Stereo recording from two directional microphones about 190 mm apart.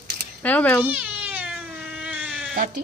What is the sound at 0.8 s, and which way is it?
Cat, 10° right (ahead or behind).